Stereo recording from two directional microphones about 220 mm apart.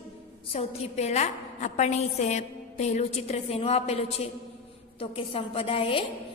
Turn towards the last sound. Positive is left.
turn(degrees=25)  # may be behind; listen again after turning